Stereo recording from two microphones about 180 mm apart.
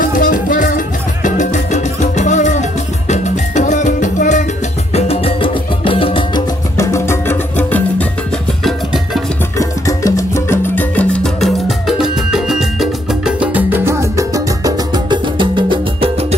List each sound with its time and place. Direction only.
0.0 s music: 45° left (ahead or behind); by 6.4 s 30° left (ahead or behind)
6.8 s music: 15° left (ahead or behind)
8.6 s music: centre (ahead or behind)
9.6 s music: 20° left (ahead or behind); by 16.3 s 35° right (ahead or behind)